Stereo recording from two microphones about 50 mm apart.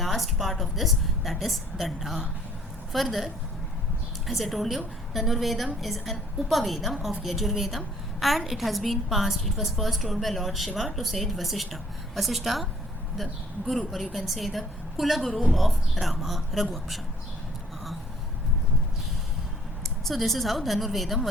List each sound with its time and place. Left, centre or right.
0.0 s a woman's voice: centre
4.3 s a woman's voice: centre
13.7 s a woman's voice: centre
20.1 s a woman's voice: centre